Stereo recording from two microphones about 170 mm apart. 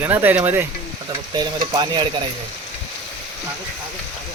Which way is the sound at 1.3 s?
25° right (ahead or behind).